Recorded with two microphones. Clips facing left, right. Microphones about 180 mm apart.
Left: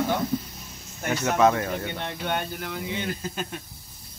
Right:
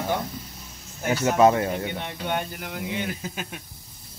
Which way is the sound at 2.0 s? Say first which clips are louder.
Even; centre (ahead or behind).